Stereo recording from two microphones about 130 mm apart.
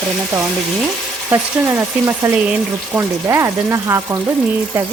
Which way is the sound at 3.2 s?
20° right (ahead or behind).